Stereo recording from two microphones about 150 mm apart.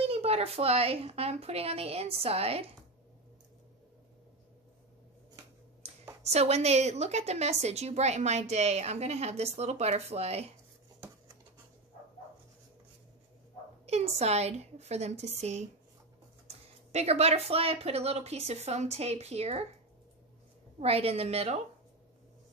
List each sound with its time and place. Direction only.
0.0 s a woman's voice: 40° right (ahead or behind)
6.2 s a woman's voice: 45° right (ahead or behind)
13.8 s a woman's voice: 45° right (ahead or behind)
16.9 s a woman's voice: 45° right (ahead or behind)
20.8 s a woman's voice: 40° right (ahead or behind)